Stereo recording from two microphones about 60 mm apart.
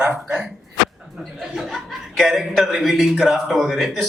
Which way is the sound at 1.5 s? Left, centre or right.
Centre.